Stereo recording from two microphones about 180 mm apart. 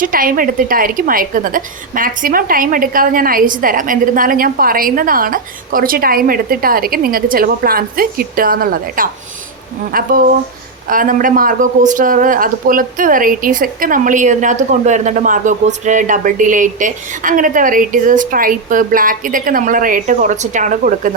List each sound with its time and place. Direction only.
0.0 s speech: 50° right (ahead or behind)
10.8 s speech: 50° right (ahead or behind)